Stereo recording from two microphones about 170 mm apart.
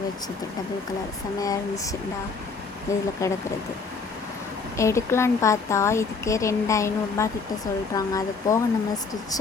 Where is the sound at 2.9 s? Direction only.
15° left (ahead or behind).